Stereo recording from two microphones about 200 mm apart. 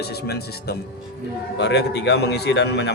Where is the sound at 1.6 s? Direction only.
60° left (ahead or behind).